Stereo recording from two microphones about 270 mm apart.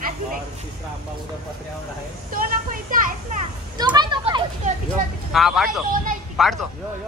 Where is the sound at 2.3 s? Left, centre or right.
Right.